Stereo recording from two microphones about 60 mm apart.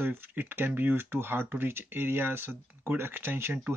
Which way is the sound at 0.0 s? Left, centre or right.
Right.